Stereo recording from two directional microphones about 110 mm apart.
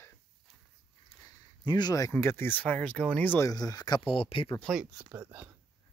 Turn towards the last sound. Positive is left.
turn(degrees=-15)  # may be behind; listen again after turning